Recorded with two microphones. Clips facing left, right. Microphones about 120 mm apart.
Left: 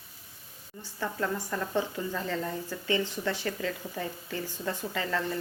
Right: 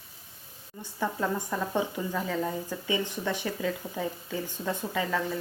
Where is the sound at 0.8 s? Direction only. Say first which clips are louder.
Right 2 dB; 15° right (ahead or behind).